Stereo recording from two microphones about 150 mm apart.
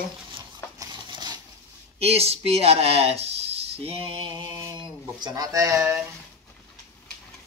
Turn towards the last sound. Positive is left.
turn(degrees=-20)  # may be behind; listen again after turning